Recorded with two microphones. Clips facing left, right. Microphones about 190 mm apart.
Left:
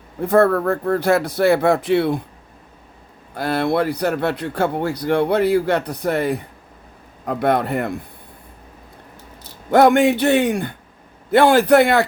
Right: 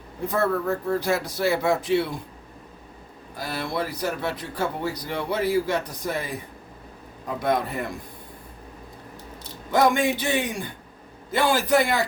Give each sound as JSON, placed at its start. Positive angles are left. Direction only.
{"t": 0.2, "sound": "speech", "side_deg": 55}
{"t": 3.3, "sound": "speech", "side_deg": 65}
{"t": 9.7, "sound": "speech", "side_deg": 65}